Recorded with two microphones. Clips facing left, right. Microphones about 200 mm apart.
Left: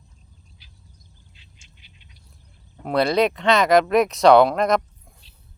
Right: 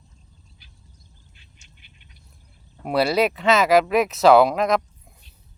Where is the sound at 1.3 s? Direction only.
50° right (ahead or behind).